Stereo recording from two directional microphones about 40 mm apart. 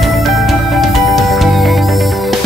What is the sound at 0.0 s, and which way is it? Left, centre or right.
Music, centre.